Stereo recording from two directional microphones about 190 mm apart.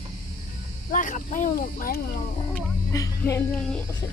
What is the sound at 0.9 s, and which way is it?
Speech, 45° left (ahead or behind).